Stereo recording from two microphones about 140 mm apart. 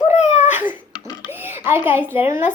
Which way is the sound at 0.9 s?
35° left (ahead or behind).